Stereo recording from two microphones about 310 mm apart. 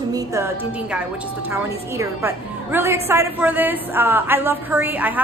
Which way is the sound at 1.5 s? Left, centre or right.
Centre.